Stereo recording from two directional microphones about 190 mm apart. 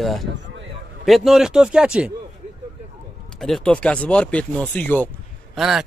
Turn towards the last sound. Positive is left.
turn(degrees=0)  # may be behind; listen again after turning